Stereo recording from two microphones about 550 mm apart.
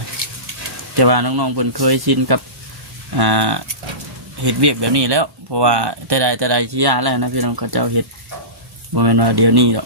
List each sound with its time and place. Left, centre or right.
0.9 s speech: right